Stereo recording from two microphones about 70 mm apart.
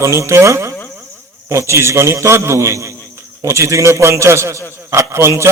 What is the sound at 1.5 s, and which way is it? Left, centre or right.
A man's voice, right.